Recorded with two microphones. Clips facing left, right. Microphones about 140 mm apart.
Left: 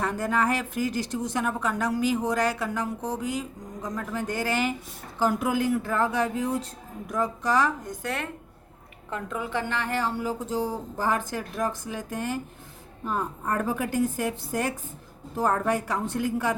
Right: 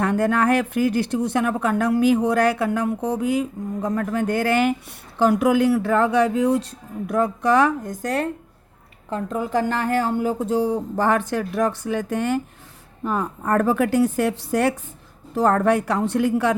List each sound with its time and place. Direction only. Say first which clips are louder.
0.0 s speech: right 6 dB; 65° right (ahead or behind)
5.2 s speech: right 8 dB; 75° right (ahead or behind)
8.0 s speech: right 9 dB; 40° right (ahead or behind); by 16.6 s 75° right (ahead or behind)